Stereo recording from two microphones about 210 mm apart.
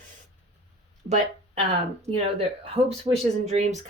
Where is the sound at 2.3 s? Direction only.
30° right (ahead or behind).